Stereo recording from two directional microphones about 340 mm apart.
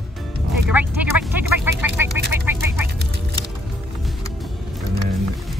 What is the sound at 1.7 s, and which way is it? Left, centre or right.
Speech, centre.